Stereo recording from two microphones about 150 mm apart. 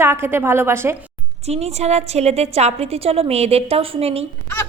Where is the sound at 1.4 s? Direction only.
45° right (ahead or behind).